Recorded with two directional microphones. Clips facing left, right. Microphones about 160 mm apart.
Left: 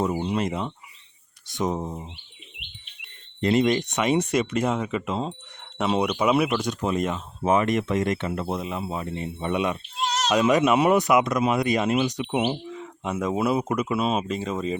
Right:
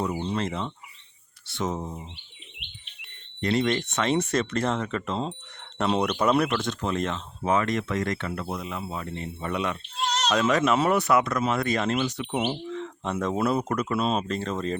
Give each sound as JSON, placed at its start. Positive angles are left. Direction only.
{"t": 0.0, "sound": "speech", "side_deg": 15}
{"t": 3.4, "sound": "speech", "side_deg": 20}
{"t": 10.0, "sound": "a sound", "side_deg": 5}
{"t": 10.3, "sound": "speech", "side_deg": 15}